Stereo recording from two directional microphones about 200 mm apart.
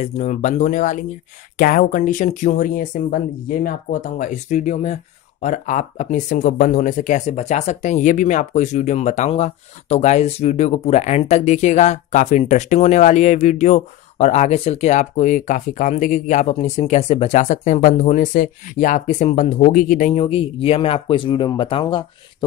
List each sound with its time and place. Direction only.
0.0 s speech: 35° left (ahead or behind)